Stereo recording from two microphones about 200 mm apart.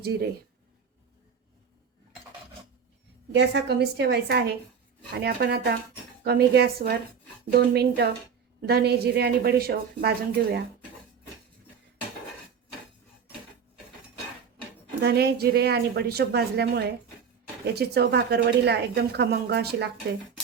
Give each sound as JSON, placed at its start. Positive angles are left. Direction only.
{"t": 0.0, "sound": "a woman's voice", "side_deg": -55}
{"t": 3.3, "sound": "a woman's voice", "side_deg": -55}
{"t": 15.0, "sound": "a woman's voice", "side_deg": -55}